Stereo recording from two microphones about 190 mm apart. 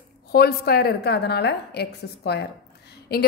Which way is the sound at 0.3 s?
55° left (ahead or behind).